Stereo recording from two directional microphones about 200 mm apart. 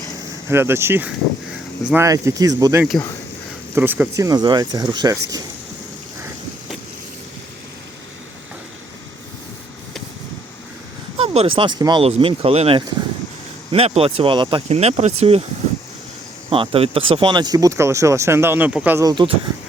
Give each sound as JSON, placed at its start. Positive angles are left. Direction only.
{"t": 0.4, "sound": "speech", "side_deg": -10}
{"t": 2.0, "sound": "speech", "side_deg": -15}
{"t": 11.2, "sound": "speech", "side_deg": -25}
{"t": 16.5, "sound": "speech", "side_deg": -30}